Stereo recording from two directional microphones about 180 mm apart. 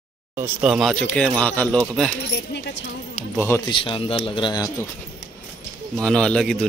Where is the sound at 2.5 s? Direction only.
70° left (ahead or behind).